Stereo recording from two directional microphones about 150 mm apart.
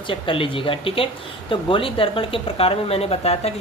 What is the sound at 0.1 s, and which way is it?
Speech, 35° left (ahead or behind).